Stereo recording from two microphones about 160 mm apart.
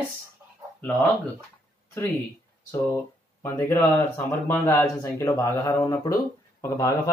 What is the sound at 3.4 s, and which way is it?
Speech, 15° left (ahead or behind).